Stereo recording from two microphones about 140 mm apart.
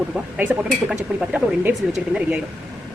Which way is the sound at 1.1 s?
10° right (ahead or behind).